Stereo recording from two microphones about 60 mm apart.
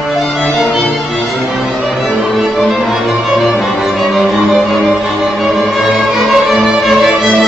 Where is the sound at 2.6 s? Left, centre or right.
Centre.